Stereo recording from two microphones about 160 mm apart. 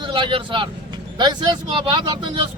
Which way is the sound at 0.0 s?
30° right (ahead or behind).